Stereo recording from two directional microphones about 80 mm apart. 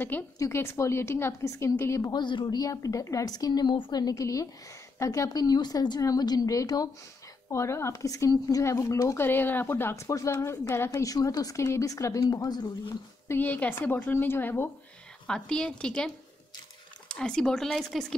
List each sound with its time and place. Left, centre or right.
0.4 s speech: left
2.0 s speech: left
2.6 s a woman's voice: left
4.1 s a woman's voice: left
7.5 s a woman's voice: left
13.3 s speech: left
15.2 s speech: centre
17.1 s speech: centre